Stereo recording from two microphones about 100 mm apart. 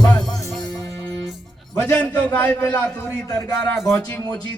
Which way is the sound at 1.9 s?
15° left (ahead or behind).